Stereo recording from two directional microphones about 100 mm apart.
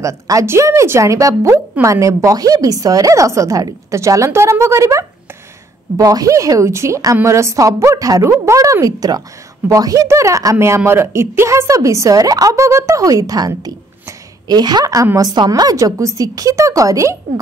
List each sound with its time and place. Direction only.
0.0 s a woman's voice: 30° right (ahead or behind)